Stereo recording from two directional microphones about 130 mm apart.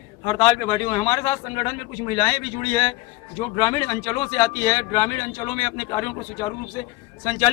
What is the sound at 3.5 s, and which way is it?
A man's voice, 35° left (ahead or behind).